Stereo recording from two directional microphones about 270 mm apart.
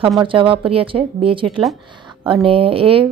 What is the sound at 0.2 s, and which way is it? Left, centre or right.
A woman's voice, centre.